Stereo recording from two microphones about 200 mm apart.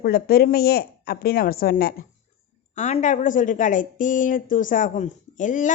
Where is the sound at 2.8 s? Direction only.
35° left (ahead or behind).